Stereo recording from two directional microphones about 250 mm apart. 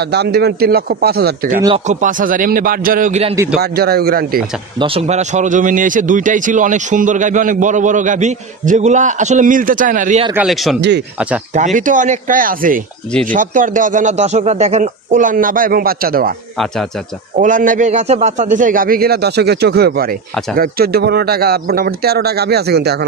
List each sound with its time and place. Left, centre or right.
0.1 s speech: right
3.7 s speech: right
4.7 s speech: right
10.3 s speech: centre
11.5 s speech: right
17.4 s speech: right